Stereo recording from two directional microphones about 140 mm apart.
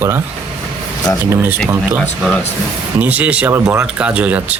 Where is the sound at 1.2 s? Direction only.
15° right (ahead or behind).